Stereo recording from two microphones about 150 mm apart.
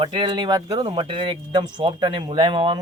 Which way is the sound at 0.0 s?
30° right (ahead or behind).